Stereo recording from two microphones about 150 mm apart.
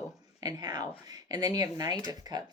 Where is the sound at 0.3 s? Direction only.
25° right (ahead or behind).